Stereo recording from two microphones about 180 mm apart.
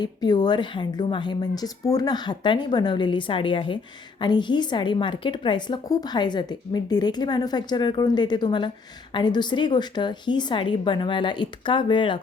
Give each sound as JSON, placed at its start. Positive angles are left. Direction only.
{"t": 0.0, "sound": "a woman's voice", "side_deg": 25}